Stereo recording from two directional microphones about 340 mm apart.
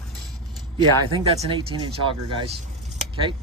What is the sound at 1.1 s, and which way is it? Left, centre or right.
Speech, centre.